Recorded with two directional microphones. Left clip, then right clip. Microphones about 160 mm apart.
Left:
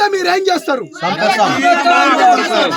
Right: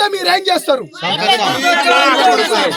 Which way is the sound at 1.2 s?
75° left (ahead or behind).